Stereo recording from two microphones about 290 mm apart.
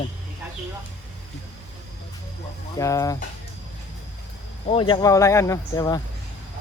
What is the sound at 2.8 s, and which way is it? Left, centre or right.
Speech, centre.